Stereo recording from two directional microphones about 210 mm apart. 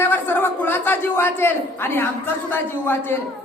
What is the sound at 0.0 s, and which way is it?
A man's voice, 10° left (ahead or behind).